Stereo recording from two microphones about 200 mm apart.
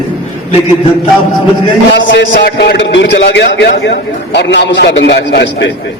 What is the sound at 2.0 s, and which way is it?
Speech, 70° left (ahead or behind).